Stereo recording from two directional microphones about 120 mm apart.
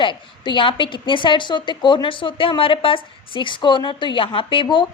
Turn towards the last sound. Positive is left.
turn(degrees=45)  # may be behind; listen again after turning